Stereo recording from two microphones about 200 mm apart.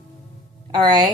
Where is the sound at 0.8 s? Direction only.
20° right (ahead or behind).